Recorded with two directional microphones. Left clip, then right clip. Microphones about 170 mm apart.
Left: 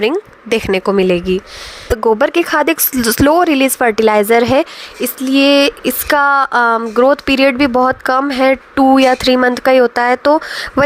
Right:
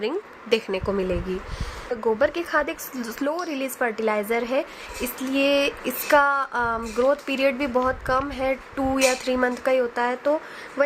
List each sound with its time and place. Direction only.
0.0 s speech: 60° left (ahead or behind)